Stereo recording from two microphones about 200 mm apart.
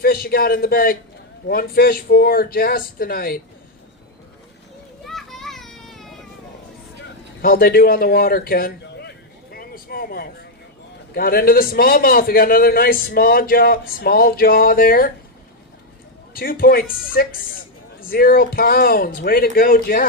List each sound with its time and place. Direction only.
0.0 s a man's voice: 45° left (ahead or behind)
5.0 s children playing: centre (ahead or behind)
7.4 s a sound: 45° left (ahead or behind)
11.1 s a man's voice: 50° left (ahead or behind)
16.3 s a man's voice: 45° left (ahead or behind)
18.1 s a man's voice: 45° left (ahead or behind)